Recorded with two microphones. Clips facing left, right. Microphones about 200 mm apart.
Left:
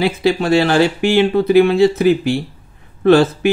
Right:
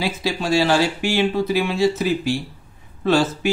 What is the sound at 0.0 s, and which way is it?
Speech, 60° left (ahead or behind).